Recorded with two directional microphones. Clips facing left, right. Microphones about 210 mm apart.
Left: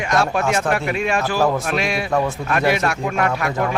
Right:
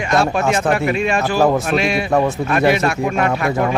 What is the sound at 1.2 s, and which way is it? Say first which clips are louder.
Speech: right 3 dB; 15° right (ahead or behind).